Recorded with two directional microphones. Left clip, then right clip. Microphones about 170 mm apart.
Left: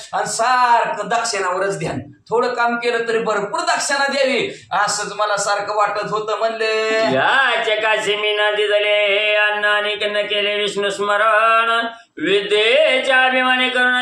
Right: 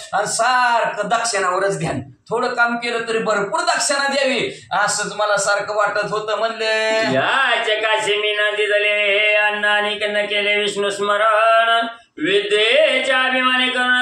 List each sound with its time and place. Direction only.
0.1 s a man's voice: 15° right (ahead or behind)
2.3 s a man's voice: 15° right (ahead or behind)
7.2 s speech: 20° left (ahead or behind)